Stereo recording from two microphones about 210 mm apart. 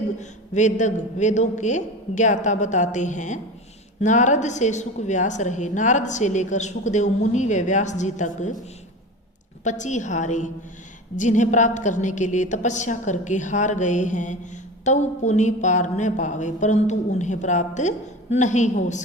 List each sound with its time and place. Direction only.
0.2 s a woman's voice: 35° left (ahead or behind)
9.6 s a woman's voice: 35° left (ahead or behind)